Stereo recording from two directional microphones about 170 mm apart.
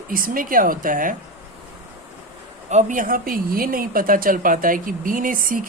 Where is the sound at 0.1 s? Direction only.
55° right (ahead or behind).